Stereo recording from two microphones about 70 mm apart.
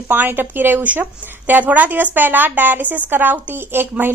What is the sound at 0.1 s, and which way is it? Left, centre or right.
A woman's voice, right.